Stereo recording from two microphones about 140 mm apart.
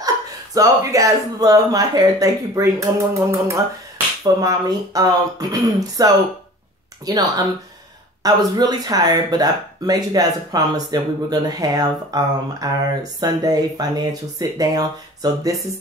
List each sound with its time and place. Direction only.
0.6 s speech: 25° right (ahead or behind)